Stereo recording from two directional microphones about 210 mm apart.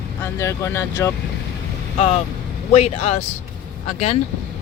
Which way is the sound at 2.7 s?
30° left (ahead or behind).